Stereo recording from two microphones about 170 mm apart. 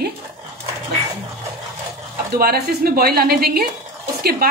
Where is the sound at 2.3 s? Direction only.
65° right (ahead or behind).